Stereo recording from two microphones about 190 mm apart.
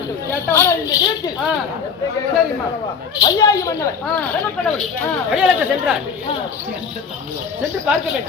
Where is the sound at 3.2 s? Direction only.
20° left (ahead or behind).